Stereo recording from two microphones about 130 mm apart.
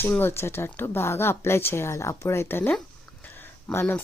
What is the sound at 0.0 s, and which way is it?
Speech, 15° left (ahead or behind).